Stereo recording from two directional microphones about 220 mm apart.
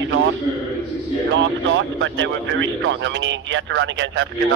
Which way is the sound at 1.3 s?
55° right (ahead or behind).